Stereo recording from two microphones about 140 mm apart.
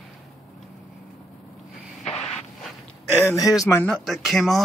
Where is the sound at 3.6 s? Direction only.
20° left (ahead or behind).